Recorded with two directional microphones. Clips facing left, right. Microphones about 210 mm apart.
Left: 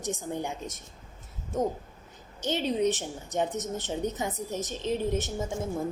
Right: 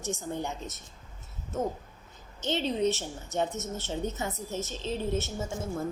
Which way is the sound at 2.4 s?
10° left (ahead or behind).